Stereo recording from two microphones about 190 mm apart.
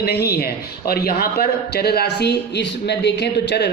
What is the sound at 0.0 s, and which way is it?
A man's voice, 55° left (ahead or behind).